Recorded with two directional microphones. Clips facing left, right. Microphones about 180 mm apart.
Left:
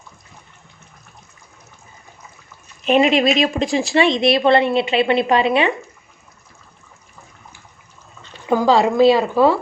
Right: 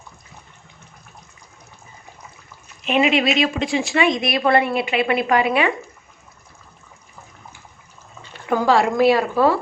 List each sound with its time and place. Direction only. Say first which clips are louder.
2.8 s speech: left 3 dB; 35° left (ahead or behind)
8.4 s speech: left 2 dB; 20° left (ahead or behind)